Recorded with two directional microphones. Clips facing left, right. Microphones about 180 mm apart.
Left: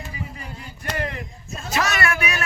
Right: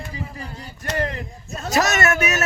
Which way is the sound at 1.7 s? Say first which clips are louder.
Right 4 dB; 45° right (ahead or behind).